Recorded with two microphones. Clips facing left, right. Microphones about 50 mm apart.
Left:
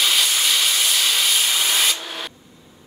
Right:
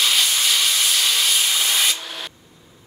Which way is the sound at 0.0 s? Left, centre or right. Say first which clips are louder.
Even; centre.